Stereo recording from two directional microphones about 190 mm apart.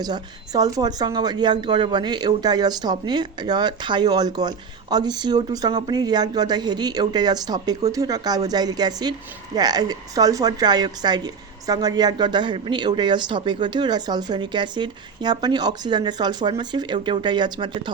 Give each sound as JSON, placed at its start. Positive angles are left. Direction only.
{"t": 0.0, "sound": "speech", "side_deg": -20}